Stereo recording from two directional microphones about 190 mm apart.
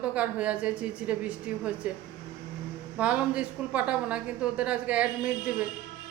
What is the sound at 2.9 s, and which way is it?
A woman's voice, 5° right (ahead or behind).